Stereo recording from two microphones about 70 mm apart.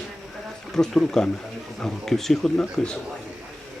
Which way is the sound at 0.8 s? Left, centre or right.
Centre.